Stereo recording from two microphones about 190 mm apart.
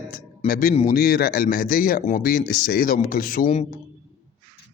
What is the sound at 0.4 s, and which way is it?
Speech, 50° left (ahead or behind).